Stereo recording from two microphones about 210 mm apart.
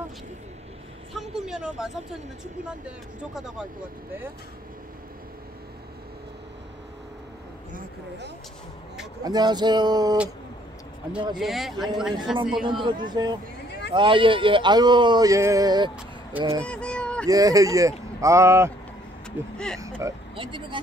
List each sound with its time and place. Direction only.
1.1 s vehicle: centre (ahead or behind)
9.2 s speech: 20° right (ahead or behind)
11.3 s speech: centre (ahead or behind)
12.6 s speech: 20° right (ahead or behind)
13.7 s a sound: 55° left (ahead or behind)
13.9 s speech: 25° right (ahead or behind)
16.6 s honk: 5° left (ahead or behind)
17.3 s speech: 15° right (ahead or behind)
19.5 s speech: 5° left (ahead or behind)
19.8 s speech: 15° right (ahead or behind)